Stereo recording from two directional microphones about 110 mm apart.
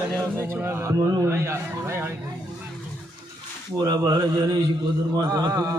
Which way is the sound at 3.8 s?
35° right (ahead or behind).